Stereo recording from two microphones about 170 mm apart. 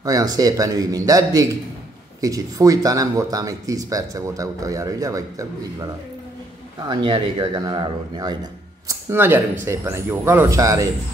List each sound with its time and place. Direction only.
0.0 s speech: 20° right (ahead or behind)
6.9 s speech: 30° right (ahead or behind)
8.8 s speech: 10° right (ahead or behind)